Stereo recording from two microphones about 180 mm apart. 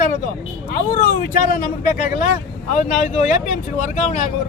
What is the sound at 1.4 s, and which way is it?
Speech, 50° left (ahead or behind).